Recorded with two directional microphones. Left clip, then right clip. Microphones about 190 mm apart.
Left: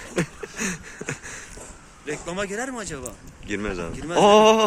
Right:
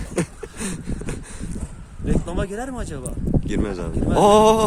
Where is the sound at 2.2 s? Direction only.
50° right (ahead or behind).